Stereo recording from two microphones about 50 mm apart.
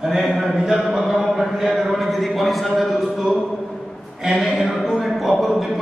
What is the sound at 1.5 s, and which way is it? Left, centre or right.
Speech, centre.